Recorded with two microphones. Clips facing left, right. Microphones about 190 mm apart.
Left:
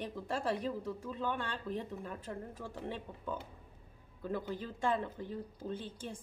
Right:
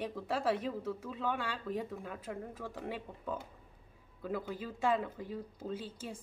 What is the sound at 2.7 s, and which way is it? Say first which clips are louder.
A woman's voice: right 1 dB; 5° right (ahead or behind).